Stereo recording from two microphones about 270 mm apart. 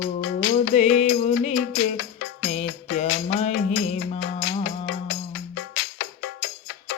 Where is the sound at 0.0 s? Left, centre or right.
Left.